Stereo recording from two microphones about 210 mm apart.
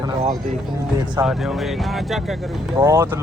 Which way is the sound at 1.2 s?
Centre (ahead or behind).